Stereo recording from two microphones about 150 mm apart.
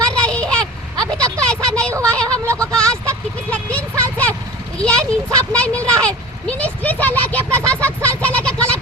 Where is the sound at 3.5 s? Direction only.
10° left (ahead or behind).